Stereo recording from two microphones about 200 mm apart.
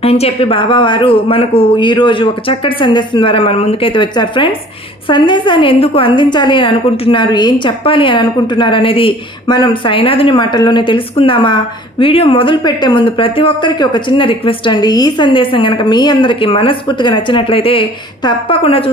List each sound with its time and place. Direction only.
0.0 s a woman's voice: 30° left (ahead or behind)